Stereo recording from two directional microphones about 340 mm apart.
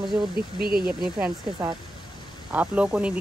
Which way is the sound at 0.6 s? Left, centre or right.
Right.